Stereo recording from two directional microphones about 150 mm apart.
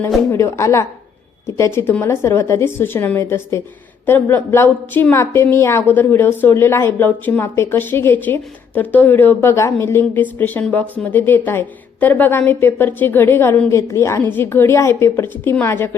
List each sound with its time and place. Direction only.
0.3 s a woman's voice: 20° left (ahead or behind)